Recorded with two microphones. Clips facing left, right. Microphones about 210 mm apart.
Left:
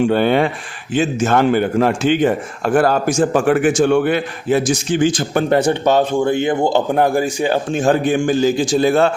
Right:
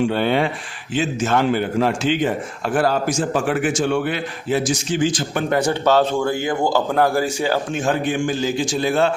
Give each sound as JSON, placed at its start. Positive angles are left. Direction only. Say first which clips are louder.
{"t": 0.1, "sound": "a man's voice", "louder": "left 4 dB", "side_deg": 50}
{"t": 5.5, "sound": "a man's voice", "louder": "left 2 dB", "side_deg": 25}
{"t": 7.7, "sound": "a man's voice", "louder": "left 5 dB", "side_deg": 35}